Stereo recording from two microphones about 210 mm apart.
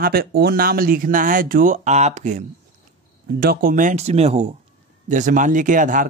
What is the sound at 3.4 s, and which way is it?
Speech, 45° right (ahead or behind).